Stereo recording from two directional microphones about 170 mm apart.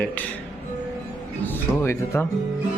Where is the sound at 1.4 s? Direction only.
10° left (ahead or behind).